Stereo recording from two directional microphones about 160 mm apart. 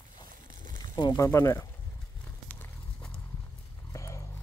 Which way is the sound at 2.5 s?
10° left (ahead or behind).